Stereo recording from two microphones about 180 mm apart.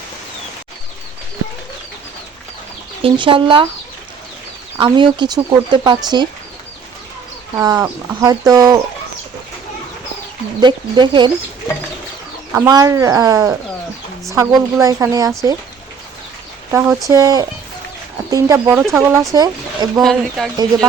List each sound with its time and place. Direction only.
3.0 s speech: 30° right (ahead or behind)
4.8 s speech: 25° right (ahead or behind)
7.5 s speech: 20° right (ahead or behind)
10.6 s speech: 25° right (ahead or behind)
12.5 s a woman's voice: 20° right (ahead or behind)
16.7 s a woman's voice: 15° right (ahead or behind)
20.0 s speech: centre (ahead or behind)